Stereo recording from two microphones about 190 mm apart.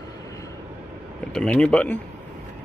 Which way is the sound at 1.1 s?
5° left (ahead or behind).